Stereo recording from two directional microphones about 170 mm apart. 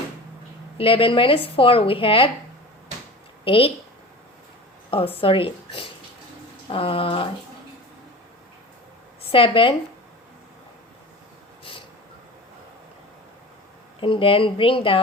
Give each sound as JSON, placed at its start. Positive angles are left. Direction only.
{"t": 0.8, "sound": "speech", "side_deg": 30}
{"t": 3.4, "sound": "speech", "side_deg": 30}
{"t": 4.9, "sound": "speech", "side_deg": 30}
{"t": 9.3, "sound": "speech", "side_deg": 30}
{"t": 14.0, "sound": "speech", "side_deg": 30}